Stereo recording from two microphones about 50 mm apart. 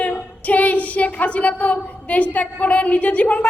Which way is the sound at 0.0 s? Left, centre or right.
Left.